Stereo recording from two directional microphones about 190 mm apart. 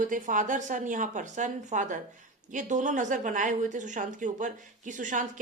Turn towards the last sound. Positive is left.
turn(degrees=-40)  # may be behind; listen again after turning